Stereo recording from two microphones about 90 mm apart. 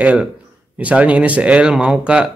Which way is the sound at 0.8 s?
15° right (ahead or behind).